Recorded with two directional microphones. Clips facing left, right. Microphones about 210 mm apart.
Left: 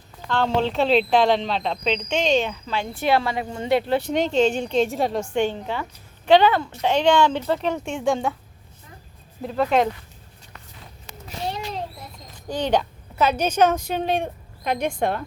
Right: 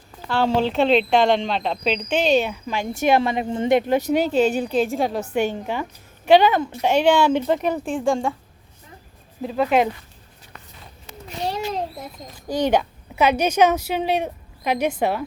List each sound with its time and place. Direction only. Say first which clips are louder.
0.3 s a woman's voice: right 2 dB; 5° right (ahead or behind)
7.9 s speech: right 1 dB; centre (ahead or behind)
9.4 s speech: right 1 dB; 5° right (ahead or behind)
11.4 s a sound: right 4 dB; 40° right (ahead or behind)
12.5 s a woman's voice: right 2 dB; 10° right (ahead or behind)